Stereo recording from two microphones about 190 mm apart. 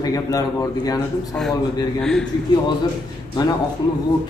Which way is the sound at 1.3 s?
5° left (ahead or behind).